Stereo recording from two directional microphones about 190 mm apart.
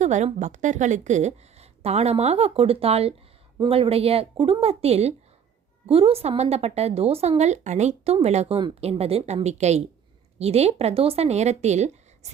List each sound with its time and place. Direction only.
0.0 s a woman's voice: 40° right (ahead or behind)